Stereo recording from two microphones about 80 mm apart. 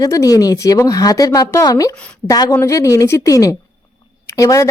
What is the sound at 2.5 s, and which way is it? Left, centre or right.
Speech, left.